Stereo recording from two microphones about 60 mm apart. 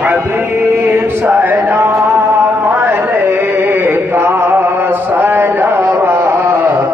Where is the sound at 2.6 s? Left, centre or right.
Right.